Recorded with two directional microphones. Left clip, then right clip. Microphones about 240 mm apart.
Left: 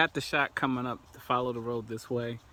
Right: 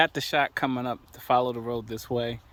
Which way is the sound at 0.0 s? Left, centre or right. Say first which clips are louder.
Right 4 dB; centre.